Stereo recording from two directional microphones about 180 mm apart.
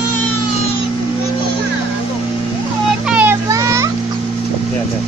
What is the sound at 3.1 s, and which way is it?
Vehicle, 10° right (ahead or behind).